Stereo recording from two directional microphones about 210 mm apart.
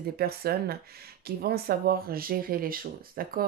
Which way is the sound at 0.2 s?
50° right (ahead or behind).